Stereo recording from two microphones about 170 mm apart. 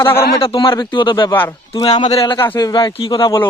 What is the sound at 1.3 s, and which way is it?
Speech, 10° left (ahead or behind).